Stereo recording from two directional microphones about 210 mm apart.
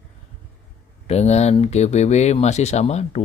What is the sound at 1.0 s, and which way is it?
Speech, 30° left (ahead or behind).